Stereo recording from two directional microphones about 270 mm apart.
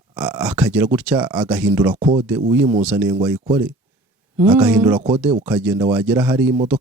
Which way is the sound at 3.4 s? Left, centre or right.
Centre.